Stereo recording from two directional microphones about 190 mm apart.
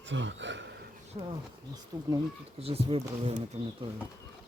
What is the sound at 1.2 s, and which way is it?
Speech, 30° right (ahead or behind).